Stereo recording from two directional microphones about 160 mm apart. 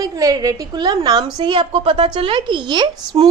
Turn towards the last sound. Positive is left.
turn(degrees=-25)  # may be behind; listen again after turning